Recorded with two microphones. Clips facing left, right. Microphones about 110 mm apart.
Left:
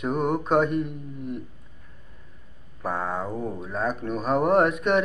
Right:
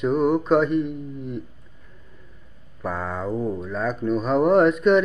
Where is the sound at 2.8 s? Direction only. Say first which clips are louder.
Even; 25° left (ahead or behind).